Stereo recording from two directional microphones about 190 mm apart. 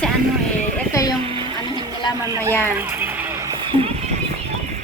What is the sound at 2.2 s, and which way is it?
Speech, 15° right (ahead or behind).